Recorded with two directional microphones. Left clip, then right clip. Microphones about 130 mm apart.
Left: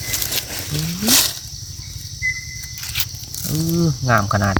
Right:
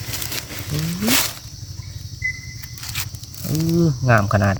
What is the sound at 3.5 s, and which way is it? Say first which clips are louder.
Speech: right 1 dB; 25° right (ahead or behind).